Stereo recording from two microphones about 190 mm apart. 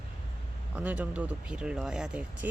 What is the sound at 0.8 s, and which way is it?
Speech, 10° right (ahead or behind).